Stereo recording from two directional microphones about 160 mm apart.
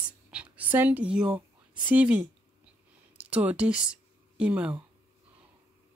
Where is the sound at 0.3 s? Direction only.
10° right (ahead or behind).